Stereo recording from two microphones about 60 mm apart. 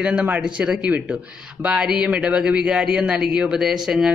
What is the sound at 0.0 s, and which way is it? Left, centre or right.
A man's voice, right.